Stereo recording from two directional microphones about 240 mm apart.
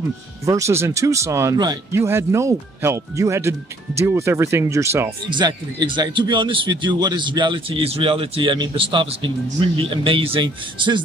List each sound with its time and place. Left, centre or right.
0.5 s speech: centre